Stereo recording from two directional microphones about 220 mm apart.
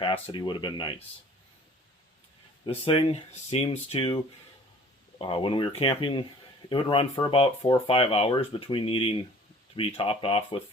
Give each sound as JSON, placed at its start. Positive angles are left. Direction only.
{"t": 0.0, "sound": "speech", "side_deg": 20}
{"t": 2.6, "sound": "speech", "side_deg": 25}
{"t": 5.2, "sound": "speech", "side_deg": 25}